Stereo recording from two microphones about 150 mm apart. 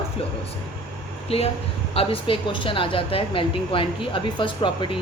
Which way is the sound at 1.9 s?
40° left (ahead or behind).